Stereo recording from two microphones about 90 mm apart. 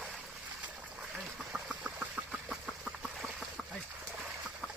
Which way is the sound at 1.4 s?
10° right (ahead or behind).